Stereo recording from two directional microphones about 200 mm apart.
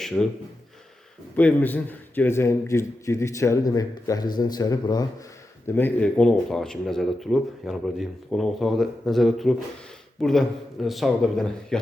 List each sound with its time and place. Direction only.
0.2 s speech: 5° left (ahead or behind)
1.4 s speech: 10° left (ahead or behind)